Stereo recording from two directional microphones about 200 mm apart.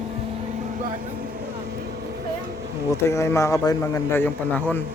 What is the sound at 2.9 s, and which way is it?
A man's voice, 15° left (ahead or behind).